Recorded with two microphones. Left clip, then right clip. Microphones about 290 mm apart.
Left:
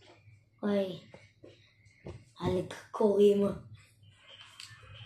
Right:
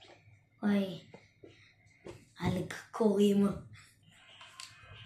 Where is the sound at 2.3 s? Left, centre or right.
Right.